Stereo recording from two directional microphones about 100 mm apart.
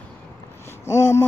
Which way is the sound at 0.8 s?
25° left (ahead or behind).